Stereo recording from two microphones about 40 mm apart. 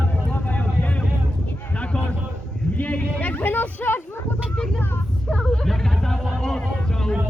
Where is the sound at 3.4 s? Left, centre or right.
Left.